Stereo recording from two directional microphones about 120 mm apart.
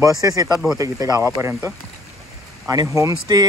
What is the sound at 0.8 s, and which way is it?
Speech, 30° right (ahead or behind).